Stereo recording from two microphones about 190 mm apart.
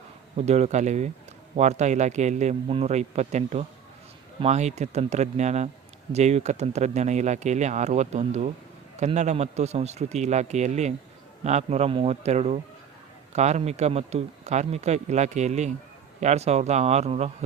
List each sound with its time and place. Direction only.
0.3 s speech: 35° right (ahead or behind)